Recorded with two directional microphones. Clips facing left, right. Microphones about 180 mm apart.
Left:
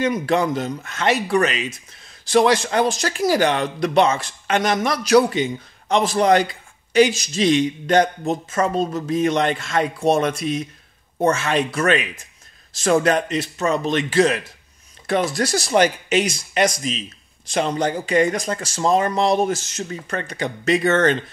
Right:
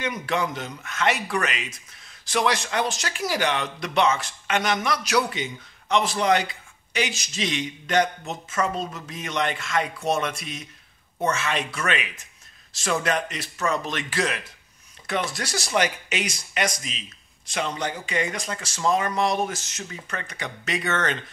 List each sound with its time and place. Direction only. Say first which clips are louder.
0.0 s speech: left 7 dB; 35° left (ahead or behind)
13.3 s speech: left 6 dB; 25° left (ahead or behind)
15.0 s speech: left 8 dB; 40° left (ahead or behind)